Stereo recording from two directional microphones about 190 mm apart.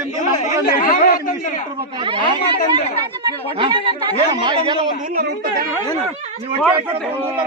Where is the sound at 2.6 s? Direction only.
35° left (ahead or behind).